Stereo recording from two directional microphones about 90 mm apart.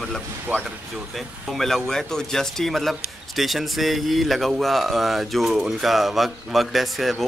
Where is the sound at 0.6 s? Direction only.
Centre (ahead or behind).